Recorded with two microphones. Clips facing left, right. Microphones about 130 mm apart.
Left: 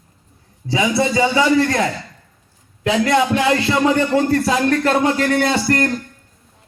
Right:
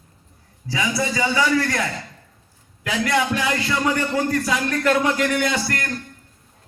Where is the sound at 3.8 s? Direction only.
30° left (ahead or behind).